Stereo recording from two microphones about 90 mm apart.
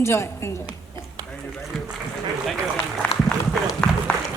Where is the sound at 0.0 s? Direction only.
30° left (ahead or behind).